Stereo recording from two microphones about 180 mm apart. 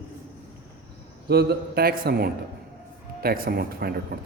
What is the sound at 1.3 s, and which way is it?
A man's voice, 65° right (ahead or behind).